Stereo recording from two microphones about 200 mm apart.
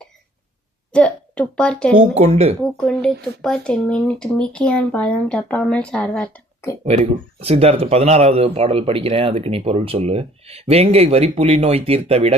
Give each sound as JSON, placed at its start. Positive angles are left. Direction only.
{"t": 0.9, "sound": "a sound", "side_deg": 5}
{"t": 2.0, "sound": "speech", "side_deg": -30}
{"t": 2.6, "sound": "speech", "side_deg": 5}
{"t": 6.8, "sound": "speech", "side_deg": -30}